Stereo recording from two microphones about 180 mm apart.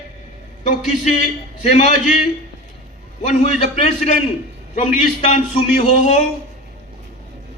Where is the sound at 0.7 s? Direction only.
40° left (ahead or behind).